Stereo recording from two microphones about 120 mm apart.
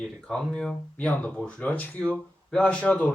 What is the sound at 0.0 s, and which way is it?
Speech, 5° left (ahead or behind).